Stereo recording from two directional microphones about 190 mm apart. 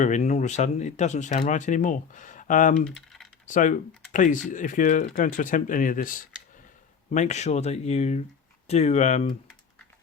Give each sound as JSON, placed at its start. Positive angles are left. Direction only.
{"t": 0.0, "sound": "speech", "side_deg": 40}
{"t": 2.8, "sound": "typing", "side_deg": 0}
{"t": 3.4, "sound": "speech", "side_deg": 40}